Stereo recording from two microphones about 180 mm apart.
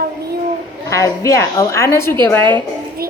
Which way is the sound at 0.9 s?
15° left (ahead or behind).